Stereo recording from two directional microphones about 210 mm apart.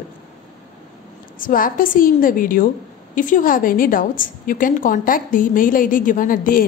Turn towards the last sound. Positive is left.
turn(degrees=40)  # may be behind; listen again after turning